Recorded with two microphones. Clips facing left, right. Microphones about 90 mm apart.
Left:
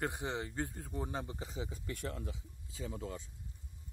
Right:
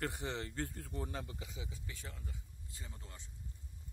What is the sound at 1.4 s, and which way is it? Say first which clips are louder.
Speech: left 6 dB; 40° left (ahead or behind).